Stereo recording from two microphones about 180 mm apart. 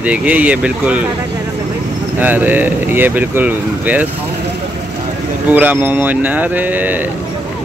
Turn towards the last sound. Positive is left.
turn(degrees=-10)  # may be behind; listen again after turning